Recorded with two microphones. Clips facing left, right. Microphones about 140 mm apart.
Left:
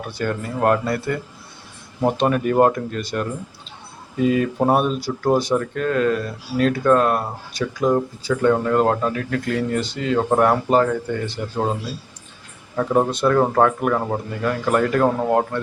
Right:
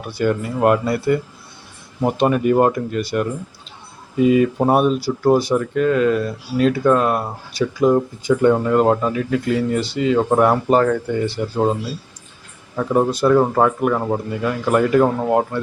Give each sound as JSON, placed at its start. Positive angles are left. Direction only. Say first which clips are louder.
{"t": 0.2, "sound": "speech", "louder": "right 4 dB", "side_deg": -10}
{"t": 8.2, "sound": "speech", "louder": "right 4 dB", "side_deg": -15}
{"t": 8.7, "sound": "speech", "louder": "right 3 dB", "side_deg": -5}
{"t": 10.8, "sound": "speech", "louder": "right 2 dB", "side_deg": 10}
{"t": 11.5, "sound": "speech", "louder": "right 3 dB", "side_deg": -5}